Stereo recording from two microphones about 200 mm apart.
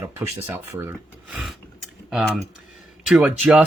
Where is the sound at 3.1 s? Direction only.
5° right (ahead or behind).